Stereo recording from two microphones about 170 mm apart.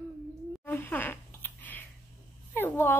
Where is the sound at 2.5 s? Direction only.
10° left (ahead or behind).